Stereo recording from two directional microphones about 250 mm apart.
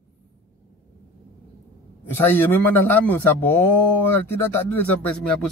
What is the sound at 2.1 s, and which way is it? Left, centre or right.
Speech, centre.